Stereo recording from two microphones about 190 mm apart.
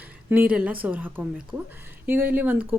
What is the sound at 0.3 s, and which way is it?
Speech, 5° right (ahead or behind).